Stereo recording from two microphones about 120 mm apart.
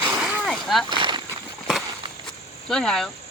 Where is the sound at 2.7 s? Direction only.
5° left (ahead or behind).